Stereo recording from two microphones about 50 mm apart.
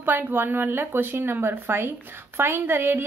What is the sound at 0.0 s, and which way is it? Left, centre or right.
A woman's voice, right.